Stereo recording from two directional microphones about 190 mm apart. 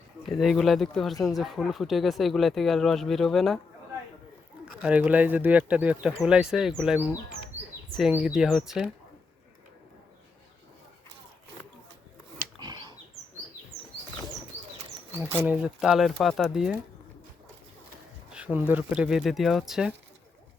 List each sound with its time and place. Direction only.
0.3 s speech: centre (ahead or behind)
4.8 s speech: 5° right (ahead or behind)
12.5 s a sound: 20° right (ahead or behind)
15.2 s speech: 10° right (ahead or behind)
18.3 s speech: 10° right (ahead or behind)